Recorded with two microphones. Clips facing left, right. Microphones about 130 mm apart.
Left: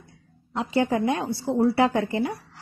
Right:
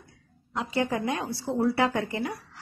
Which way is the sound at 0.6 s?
30° left (ahead or behind).